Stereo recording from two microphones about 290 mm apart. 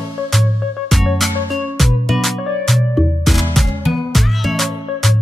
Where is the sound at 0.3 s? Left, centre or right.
Centre.